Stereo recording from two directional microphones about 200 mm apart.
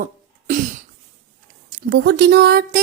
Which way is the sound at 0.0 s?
40° right (ahead or behind).